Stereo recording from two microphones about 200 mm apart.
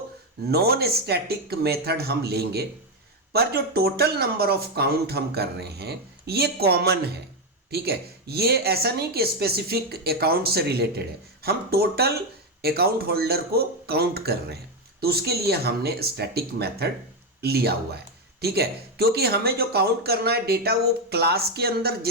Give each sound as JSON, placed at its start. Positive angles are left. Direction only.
{"t": 0.5, "sound": "speech", "side_deg": -50}